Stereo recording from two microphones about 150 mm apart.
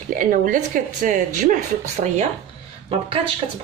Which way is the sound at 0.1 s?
65° right (ahead or behind).